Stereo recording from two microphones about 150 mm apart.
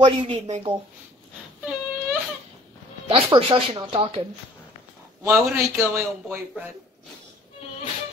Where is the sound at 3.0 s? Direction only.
35° right (ahead or behind).